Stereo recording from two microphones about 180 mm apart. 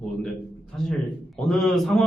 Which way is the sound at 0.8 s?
Centre (ahead or behind).